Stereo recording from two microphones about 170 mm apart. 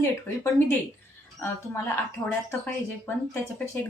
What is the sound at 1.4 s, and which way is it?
Speech, 15° left (ahead or behind).